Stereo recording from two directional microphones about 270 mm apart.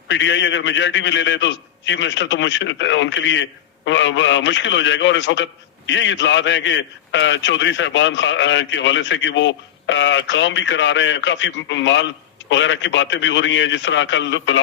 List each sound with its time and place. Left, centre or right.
0.1 s a man's voice: left